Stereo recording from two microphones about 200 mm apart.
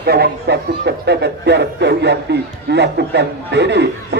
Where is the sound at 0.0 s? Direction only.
55° right (ahead or behind).